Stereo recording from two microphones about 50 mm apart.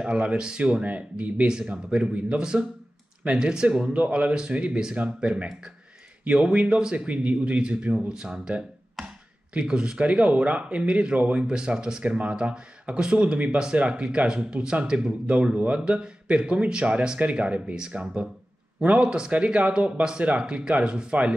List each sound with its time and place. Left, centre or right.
0.0 s speech: right
3.9 s speech: right